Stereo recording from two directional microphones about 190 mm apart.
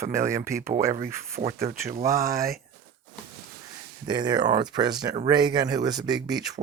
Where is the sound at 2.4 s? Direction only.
50° right (ahead or behind).